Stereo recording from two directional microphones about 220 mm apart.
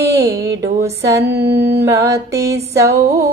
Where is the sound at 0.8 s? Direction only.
15° right (ahead or behind).